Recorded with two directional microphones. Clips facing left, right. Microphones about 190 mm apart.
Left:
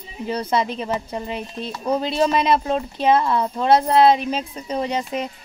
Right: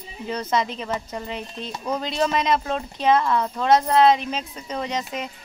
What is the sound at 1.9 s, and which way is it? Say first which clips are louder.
Speech: left 4 dB; 30° left (ahead or behind).